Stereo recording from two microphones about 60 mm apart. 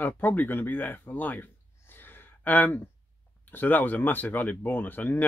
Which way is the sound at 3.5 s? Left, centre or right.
Left.